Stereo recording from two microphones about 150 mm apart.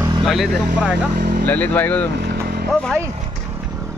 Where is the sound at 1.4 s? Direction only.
10° left (ahead or behind).